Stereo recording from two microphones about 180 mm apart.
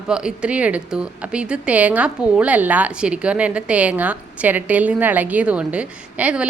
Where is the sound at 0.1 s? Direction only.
5° right (ahead or behind).